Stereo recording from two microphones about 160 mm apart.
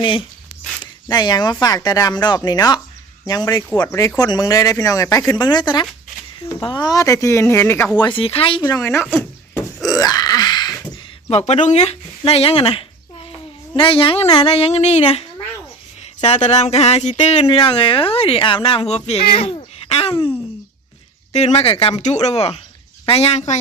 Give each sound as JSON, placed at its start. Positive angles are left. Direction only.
{"t": 0.0, "sound": "speech", "side_deg": 30}
{"t": 7.9, "sound": "speech", "side_deg": 30}
{"t": 8.7, "sound": "speech", "side_deg": 15}
{"t": 9.1, "sound": "a sound", "side_deg": 10}
{"t": 9.9, "sound": "a sound", "side_deg": 25}
{"t": 11.3, "sound": "speech", "side_deg": 40}
{"t": 16.2, "sound": "speech", "side_deg": 40}
{"t": 21.3, "sound": "speech", "side_deg": 40}